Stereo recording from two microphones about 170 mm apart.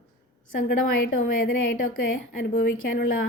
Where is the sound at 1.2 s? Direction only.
55° left (ahead or behind).